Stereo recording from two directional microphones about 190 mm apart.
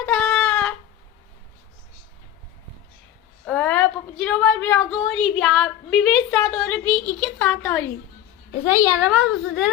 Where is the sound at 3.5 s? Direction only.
5° left (ahead or behind).